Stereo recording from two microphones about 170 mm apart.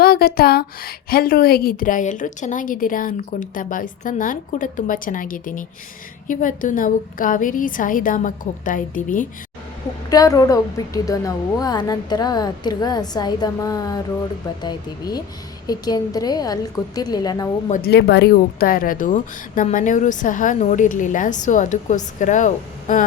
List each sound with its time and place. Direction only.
0.0 s a woman's voice: 65° left (ahead or behind)
10.1 s a woman's voice: 20° left (ahead or behind)
17.8 s a woman's voice: 75° left (ahead or behind); by 23.0 s 50° left (ahead or behind)